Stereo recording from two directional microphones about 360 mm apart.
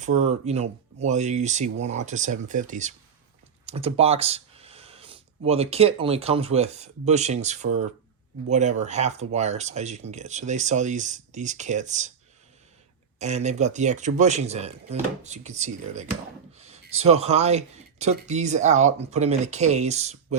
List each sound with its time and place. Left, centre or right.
0.0 s speech: centre
13.1 s speech: centre
16.6 s a sound: centre
17.0 s speech: centre